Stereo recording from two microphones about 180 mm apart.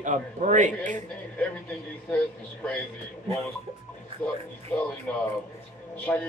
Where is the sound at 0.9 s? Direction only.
10° left (ahead or behind).